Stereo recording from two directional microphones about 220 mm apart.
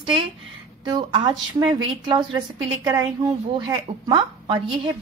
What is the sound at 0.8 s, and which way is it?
Speech, 20° right (ahead or behind).